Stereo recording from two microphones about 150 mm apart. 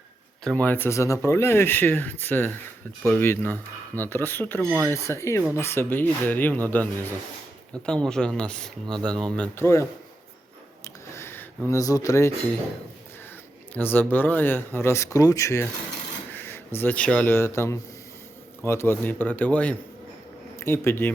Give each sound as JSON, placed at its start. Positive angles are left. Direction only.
{"t": 0.4, "sound": "speech", "side_deg": 10}
{"t": 4.6, "sound": "speech", "side_deg": -15}
{"t": 5.0, "sound": "speech", "side_deg": 20}
{"t": 11.1, "sound": "speech", "side_deg": 15}
{"t": 13.7, "sound": "speech", "side_deg": 15}